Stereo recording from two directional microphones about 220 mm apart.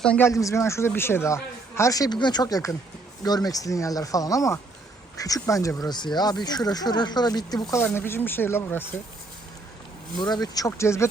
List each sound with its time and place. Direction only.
0.0 s a man's voice: 5° left (ahead or behind)
10.2 s a man's voice: 20° left (ahead or behind)